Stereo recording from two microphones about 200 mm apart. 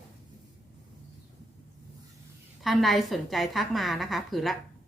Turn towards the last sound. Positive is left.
turn(degrees=0)  # may be behind; listen again after turning